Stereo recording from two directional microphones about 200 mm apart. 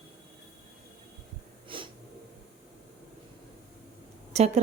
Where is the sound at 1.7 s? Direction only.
25° right (ahead or behind).